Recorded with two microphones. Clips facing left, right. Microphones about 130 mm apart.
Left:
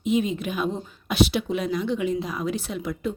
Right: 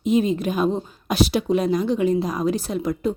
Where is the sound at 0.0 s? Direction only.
40° right (ahead or behind).